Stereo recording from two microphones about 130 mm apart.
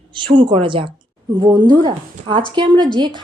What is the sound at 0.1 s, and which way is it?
A woman's voice, 40° right (ahead or behind).